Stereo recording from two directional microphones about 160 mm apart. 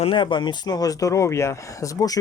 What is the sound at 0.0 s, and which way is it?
Speech, 30° left (ahead or behind).